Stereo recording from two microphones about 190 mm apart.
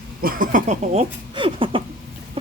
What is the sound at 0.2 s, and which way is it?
Speech, 50° right (ahead or behind).